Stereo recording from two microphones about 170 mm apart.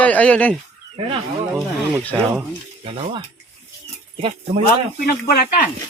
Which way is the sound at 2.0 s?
5° left (ahead or behind).